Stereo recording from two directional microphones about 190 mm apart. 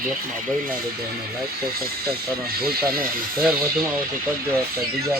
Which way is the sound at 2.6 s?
55° right (ahead or behind).